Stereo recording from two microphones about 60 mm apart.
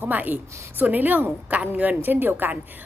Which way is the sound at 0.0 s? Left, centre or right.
Right.